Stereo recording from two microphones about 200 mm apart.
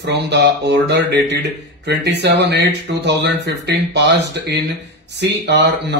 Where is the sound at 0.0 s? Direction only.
55° right (ahead or behind).